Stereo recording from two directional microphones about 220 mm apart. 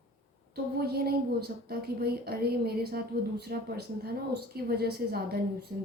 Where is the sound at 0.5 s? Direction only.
45° right (ahead or behind).